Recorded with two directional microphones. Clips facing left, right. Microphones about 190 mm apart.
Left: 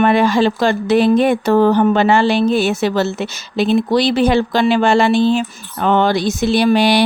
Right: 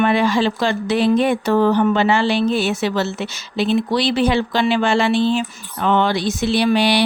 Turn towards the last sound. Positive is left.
turn(degrees=45)  # may be behind; listen again after turning